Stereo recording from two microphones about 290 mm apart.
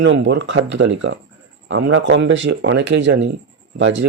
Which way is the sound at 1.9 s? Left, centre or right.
Right.